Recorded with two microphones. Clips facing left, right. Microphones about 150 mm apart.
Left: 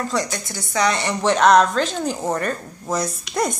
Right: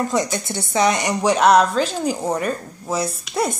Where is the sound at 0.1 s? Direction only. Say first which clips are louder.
Right 3 dB; 20° right (ahead or behind); by 3.5 s 5° right (ahead or behind).